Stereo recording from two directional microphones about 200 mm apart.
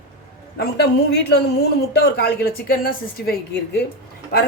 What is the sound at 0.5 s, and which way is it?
A woman's voice, 55° left (ahead or behind).